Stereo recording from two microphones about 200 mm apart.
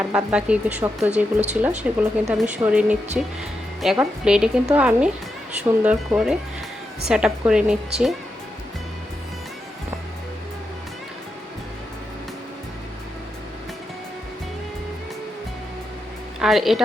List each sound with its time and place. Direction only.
0.0 s speech: 5° right (ahead or behind)
1.1 s speech: 35° right (ahead or behind)
1.8 s speech: 5° right (ahead or behind)
16.4 s speech: centre (ahead or behind)